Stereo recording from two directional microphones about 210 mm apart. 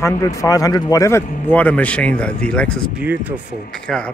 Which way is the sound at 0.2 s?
15° left (ahead or behind).